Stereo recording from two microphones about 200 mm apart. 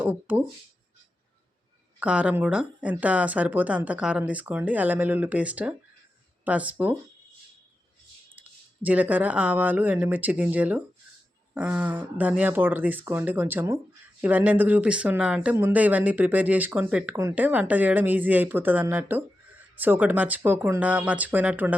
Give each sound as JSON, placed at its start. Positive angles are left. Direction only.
{"t": 0.0, "sound": "speech", "side_deg": -10}
{"t": 2.0, "sound": "speech", "side_deg": -5}
{"t": 8.4, "sound": "speech", "side_deg": -10}